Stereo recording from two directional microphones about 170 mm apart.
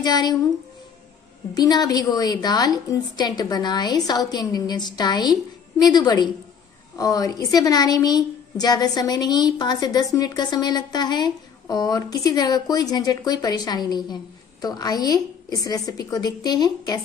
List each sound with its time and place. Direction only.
0.0 s a woman's voice: 25° left (ahead or behind)
1.5 s a woman's voice: 25° left (ahead or behind)